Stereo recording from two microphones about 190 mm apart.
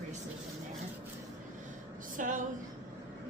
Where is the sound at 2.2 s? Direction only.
45° right (ahead or behind).